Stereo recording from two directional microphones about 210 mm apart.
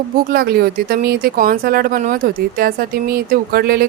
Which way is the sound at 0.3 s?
45° right (ahead or behind).